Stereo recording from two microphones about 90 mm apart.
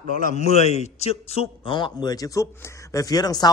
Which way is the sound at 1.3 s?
80° left.